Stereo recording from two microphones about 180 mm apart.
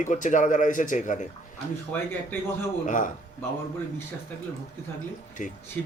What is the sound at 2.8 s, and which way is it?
Speech, 45° left (ahead or behind).